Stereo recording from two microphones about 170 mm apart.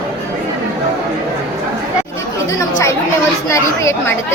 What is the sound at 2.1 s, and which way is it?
Chatter, 20° left (ahead or behind).